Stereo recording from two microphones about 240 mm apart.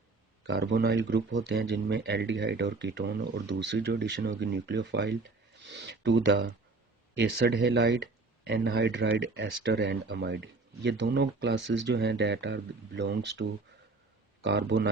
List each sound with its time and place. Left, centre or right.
0.4 s speech: right
5.6 s a sound: right
7.2 s speech: right
14.4 s speech: right